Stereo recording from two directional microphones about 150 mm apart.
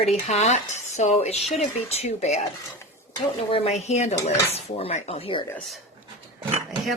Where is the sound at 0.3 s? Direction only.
50° left (ahead or behind).